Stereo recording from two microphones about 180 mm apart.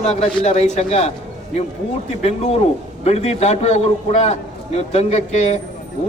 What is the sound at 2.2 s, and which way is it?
A man's voice, 35° left (ahead or behind).